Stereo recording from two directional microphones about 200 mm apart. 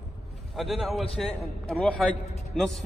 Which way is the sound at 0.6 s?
Centre (ahead or behind).